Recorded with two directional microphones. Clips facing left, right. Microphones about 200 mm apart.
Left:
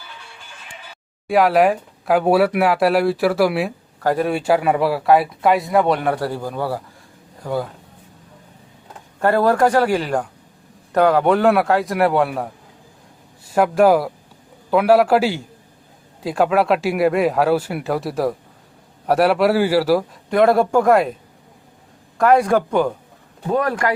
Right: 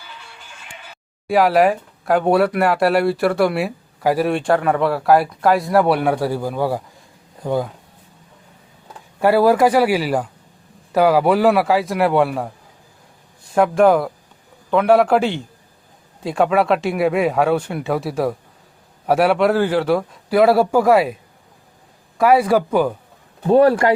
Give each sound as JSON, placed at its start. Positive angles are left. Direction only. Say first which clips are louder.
{"t": 1.3, "sound": "speech", "louder": "even", "side_deg": 0}
{"t": 4.0, "sound": "speech", "louder": "right 1 dB", "side_deg": -10}
{"t": 4.3, "sound": "speech", "louder": "even", "side_deg": 5}
{"t": 9.2, "sound": "speech", "louder": "right 2 dB", "side_deg": -10}
{"t": 13.5, "sound": "speech", "louder": "even", "side_deg": 5}
{"t": 22.2, "sound": "speech", "louder": "right 1 dB", "side_deg": -5}
{"t": 23.5, "sound": "speech", "louder": "right 7 dB", "side_deg": -30}